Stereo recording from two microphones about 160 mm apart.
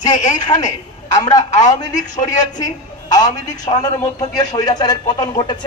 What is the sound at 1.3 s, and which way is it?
Speech, 25° left (ahead or behind).